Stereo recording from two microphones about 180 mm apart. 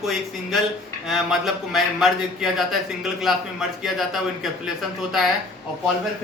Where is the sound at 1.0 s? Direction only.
Centre (ahead or behind).